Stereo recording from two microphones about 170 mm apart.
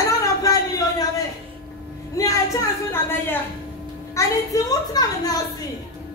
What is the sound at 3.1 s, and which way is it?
Speech, 10° left (ahead or behind).